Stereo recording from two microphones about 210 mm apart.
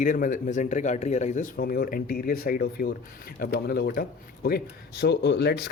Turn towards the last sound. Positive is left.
turn(degrees=50)  # may be behind; listen again after turning